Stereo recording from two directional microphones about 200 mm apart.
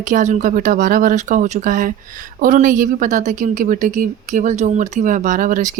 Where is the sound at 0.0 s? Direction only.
40° right (ahead or behind).